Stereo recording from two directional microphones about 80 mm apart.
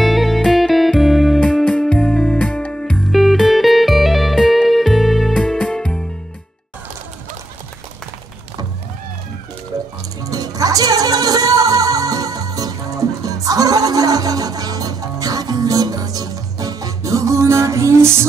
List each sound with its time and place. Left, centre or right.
0.0 s music: centre
1.6 s music: centre
3.1 s music: centre
5.4 s music: centre
10.2 s music: right